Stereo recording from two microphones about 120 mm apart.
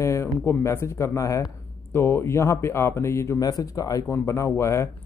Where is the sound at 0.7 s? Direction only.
25° left (ahead or behind).